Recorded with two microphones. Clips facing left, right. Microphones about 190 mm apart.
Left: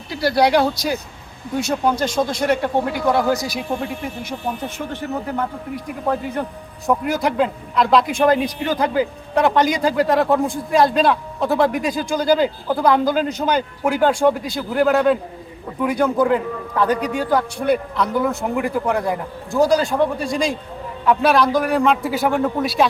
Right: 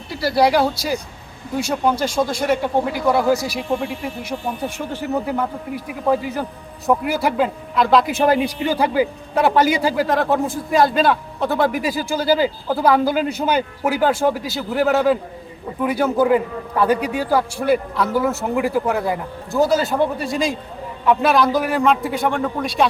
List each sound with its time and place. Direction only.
0.1 s a man's voice: centre (ahead or behind)